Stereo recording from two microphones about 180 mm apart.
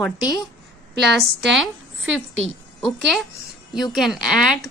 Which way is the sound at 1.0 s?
75° right (ahead or behind).